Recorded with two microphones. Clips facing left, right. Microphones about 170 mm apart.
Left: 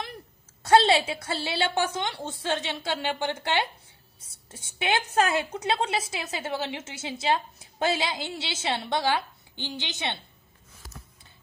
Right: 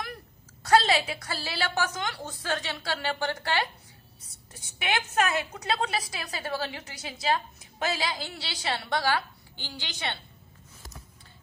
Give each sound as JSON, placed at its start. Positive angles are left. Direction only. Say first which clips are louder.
{"t": 0.7, "sound": "a woman's voice", "louder": "left 3 dB", "side_deg": 25}